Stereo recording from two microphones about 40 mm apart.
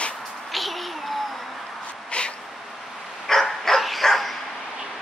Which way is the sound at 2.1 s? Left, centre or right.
Left.